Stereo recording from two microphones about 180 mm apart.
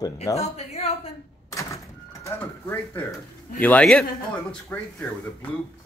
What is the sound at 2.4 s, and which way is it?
A man's voice, 15° left (ahead or behind).